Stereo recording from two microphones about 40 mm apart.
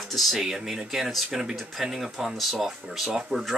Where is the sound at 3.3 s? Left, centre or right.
Right.